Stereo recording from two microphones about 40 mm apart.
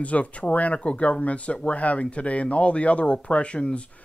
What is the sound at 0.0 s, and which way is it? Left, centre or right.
Speech, left.